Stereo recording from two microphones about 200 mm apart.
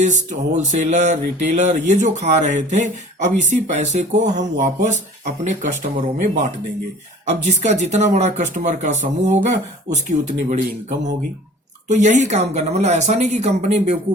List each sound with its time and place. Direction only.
0.0 s speech: 35° right (ahead or behind)
7.4 s speech: 35° right (ahead or behind)